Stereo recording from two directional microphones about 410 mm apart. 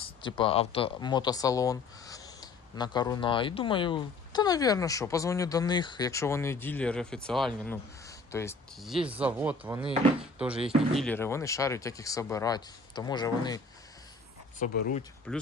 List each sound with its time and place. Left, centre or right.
0.0 s speech: centre
15.3 s speech: centre